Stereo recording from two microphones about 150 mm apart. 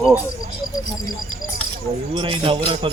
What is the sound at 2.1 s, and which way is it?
Speech, 35° right (ahead or behind).